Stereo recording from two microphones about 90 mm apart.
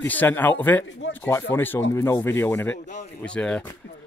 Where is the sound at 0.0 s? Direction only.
20° left (ahead or behind).